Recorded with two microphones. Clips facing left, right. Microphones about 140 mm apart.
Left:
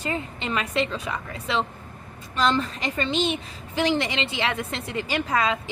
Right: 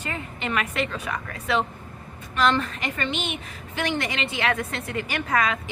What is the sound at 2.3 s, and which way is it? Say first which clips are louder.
A woman's voice: right 1 dB; 30° left (ahead or behind).